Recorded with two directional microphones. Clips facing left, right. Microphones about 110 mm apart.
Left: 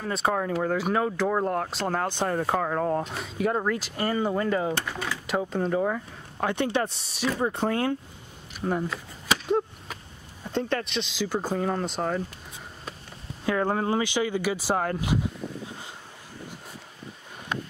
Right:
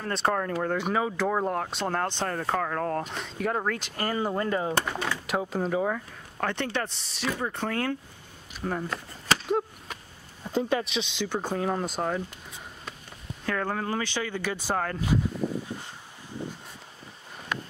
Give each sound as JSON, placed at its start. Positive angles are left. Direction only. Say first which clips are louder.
{"t": 0.0, "sound": "speech", "louder": "left 1 dB", "side_deg": 5}
{"t": 5.9, "sound": "speech", "louder": "left 2 dB", "side_deg": 15}
{"t": 8.5, "sound": "chop", "louder": "left 3 dB", "side_deg": 10}
{"t": 10.4, "sound": "speech", "louder": "right 1 dB", "side_deg": -10}
{"t": 13.7, "sound": "speech", "louder": "left 4 dB", "side_deg": 20}